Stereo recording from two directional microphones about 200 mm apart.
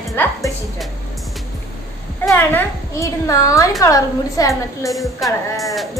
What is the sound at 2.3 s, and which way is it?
A woman's voice, 10° left (ahead or behind).